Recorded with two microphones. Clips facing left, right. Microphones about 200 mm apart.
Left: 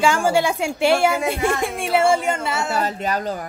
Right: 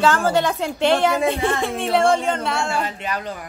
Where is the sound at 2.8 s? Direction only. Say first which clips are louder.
Left 4 dB; 40° left (ahead or behind).